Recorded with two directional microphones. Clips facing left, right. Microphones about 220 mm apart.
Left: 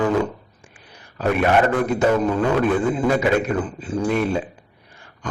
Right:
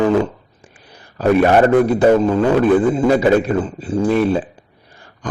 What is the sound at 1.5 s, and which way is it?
A man's voice, 35° right (ahead or behind).